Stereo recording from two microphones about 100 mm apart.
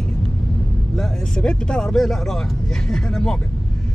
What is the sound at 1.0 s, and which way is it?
Speech, 10° left (ahead or behind).